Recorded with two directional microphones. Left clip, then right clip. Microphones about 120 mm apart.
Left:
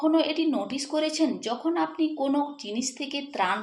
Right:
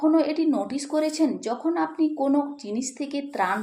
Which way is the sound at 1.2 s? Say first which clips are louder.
Right 2 dB; 30° right (ahead or behind).